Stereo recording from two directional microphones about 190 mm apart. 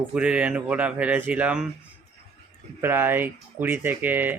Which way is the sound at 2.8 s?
10° right (ahead or behind).